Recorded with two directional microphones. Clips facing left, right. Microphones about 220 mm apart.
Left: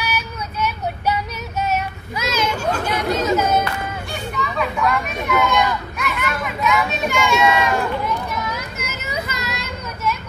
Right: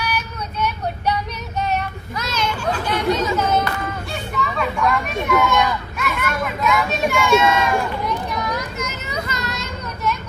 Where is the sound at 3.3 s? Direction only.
5° left (ahead or behind).